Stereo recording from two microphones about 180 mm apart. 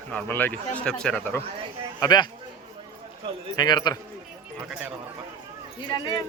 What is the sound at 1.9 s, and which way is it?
Speech, 20° left (ahead or behind).